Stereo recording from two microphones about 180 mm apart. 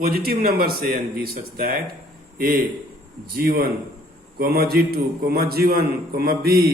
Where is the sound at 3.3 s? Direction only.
55° right (ahead or behind).